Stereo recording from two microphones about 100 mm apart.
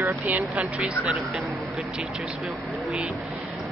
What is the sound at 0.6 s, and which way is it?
Speech, 15° right (ahead or behind).